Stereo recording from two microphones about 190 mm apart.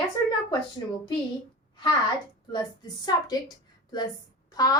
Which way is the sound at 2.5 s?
20° left (ahead or behind).